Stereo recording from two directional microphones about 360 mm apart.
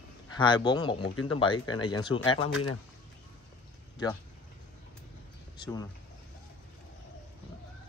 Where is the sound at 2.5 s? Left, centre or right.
Left.